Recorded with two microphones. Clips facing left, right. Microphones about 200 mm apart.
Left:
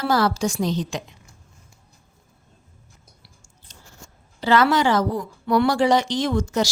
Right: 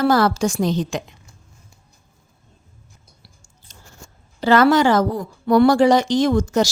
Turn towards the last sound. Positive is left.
turn(degrees=-45)  # may be behind; listen again after turning